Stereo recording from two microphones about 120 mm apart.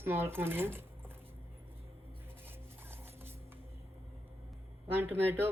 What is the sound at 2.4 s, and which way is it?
Music, 20° right (ahead or behind).